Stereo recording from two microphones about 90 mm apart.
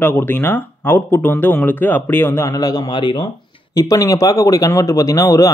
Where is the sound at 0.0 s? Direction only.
25° left (ahead or behind); by 3.3 s 60° left (ahead or behind).